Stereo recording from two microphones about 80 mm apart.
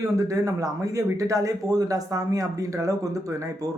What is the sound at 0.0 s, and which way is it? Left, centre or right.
Speech, right.